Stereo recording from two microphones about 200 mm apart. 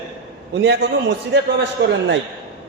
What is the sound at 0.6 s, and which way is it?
A man's voice, 55° right (ahead or behind).